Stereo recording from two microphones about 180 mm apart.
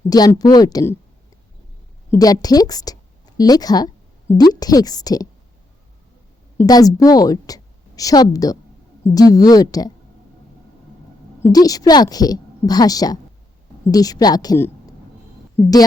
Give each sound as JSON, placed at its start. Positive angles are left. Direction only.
{"t": 0.1, "sound": "a woman's voice", "side_deg": 20}
{"t": 2.0, "sound": "a woman's voice", "side_deg": 20}
{"t": 6.6, "sound": "a woman's voice", "side_deg": 20}
{"t": 11.4, "sound": "a woman's voice", "side_deg": 20}